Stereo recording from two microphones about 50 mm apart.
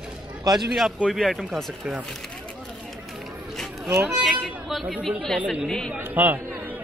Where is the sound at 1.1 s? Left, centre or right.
Centre.